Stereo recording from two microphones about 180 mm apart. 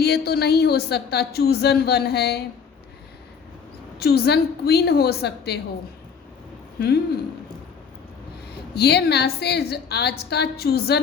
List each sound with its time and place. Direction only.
0.0 s speech: 60° left (ahead or behind)
3.9 s speech: 60° left (ahead or behind)
6.7 s speech: 60° left (ahead or behind)
8.7 s speech: 65° left (ahead or behind)